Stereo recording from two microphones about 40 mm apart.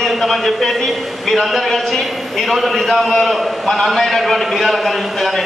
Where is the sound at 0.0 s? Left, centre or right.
Centre.